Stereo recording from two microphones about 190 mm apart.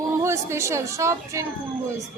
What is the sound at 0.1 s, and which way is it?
A woman's voice, 15° right (ahead or behind).